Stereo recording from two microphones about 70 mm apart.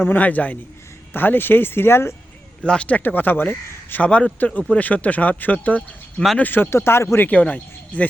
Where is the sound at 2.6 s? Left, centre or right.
Centre.